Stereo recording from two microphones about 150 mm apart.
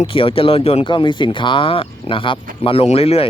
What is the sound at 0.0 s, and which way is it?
Speech, 35° left (ahead or behind).